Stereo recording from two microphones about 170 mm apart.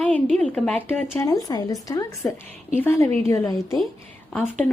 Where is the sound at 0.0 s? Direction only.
5° left (ahead or behind).